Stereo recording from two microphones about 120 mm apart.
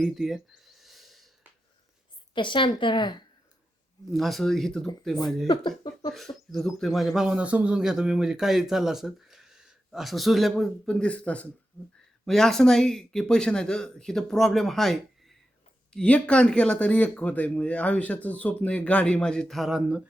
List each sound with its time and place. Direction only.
0.0 s a sound: centre (ahead or behind)
2.3 s speech: 40° left (ahead or behind)
4.1 s speech: centre (ahead or behind)
5.5 s speech: 35° left (ahead or behind)
6.1 s speech: centre (ahead or behind)